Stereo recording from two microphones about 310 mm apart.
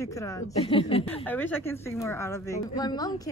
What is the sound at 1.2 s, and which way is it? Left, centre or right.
A woman's voice, centre.